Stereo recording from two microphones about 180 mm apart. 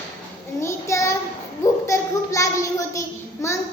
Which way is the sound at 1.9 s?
15° left (ahead or behind).